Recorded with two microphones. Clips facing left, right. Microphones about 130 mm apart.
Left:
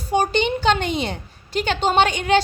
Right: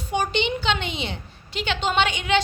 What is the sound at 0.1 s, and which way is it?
A woman's voice, 40° left (ahead or behind).